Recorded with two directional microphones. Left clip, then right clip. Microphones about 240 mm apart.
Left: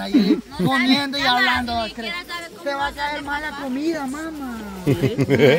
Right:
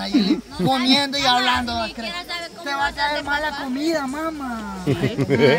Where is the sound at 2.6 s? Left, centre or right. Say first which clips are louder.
Right 2 dB; right.